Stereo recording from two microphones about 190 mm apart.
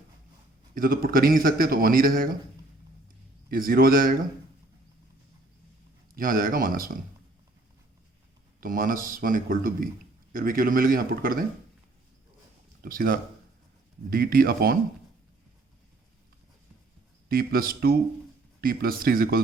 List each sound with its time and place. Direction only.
0.7 s a man's voice: 50° right (ahead or behind)
3.5 s a man's voice: 50° right (ahead or behind)
6.1 s a man's voice: 45° right (ahead or behind)
8.6 s a man's voice: 45° right (ahead or behind)
12.8 s a man's voice: 50° right (ahead or behind)
17.2 s a man's voice: 50° right (ahead or behind)